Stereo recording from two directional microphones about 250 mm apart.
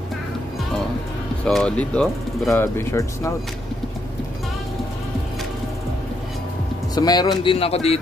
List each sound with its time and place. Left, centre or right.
1.4 s speech: centre
7.0 s speech: centre